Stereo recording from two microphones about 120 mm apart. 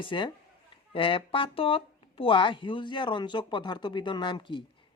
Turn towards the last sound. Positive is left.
turn(degrees=40)  # may be behind; listen again after turning